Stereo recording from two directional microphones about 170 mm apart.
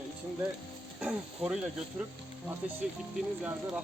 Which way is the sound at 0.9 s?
5° right (ahead or behind).